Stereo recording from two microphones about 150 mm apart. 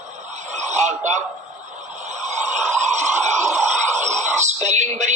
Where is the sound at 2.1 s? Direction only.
50° right (ahead or behind).